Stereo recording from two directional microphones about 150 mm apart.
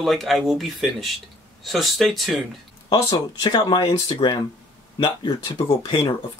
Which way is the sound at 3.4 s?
30° left (ahead or behind).